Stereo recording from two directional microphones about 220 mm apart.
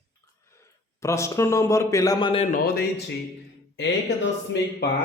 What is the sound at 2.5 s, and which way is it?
Speech, 45° left (ahead or behind).